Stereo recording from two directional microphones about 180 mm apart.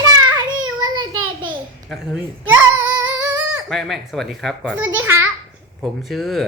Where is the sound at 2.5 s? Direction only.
10° right (ahead or behind).